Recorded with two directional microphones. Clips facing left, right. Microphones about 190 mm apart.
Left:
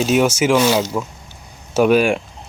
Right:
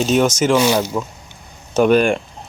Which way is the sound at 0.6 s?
10° right (ahead or behind).